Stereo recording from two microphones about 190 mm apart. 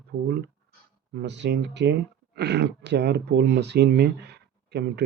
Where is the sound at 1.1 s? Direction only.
65° right (ahead or behind).